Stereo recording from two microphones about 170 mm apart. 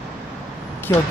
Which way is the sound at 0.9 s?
20° left (ahead or behind).